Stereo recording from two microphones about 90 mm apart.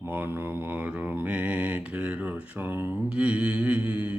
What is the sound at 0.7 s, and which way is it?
Mantra, 20° right (ahead or behind).